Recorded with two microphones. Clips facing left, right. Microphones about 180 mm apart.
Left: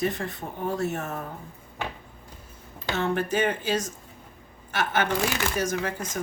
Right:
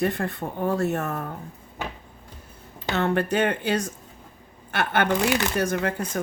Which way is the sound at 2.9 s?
65° right (ahead or behind).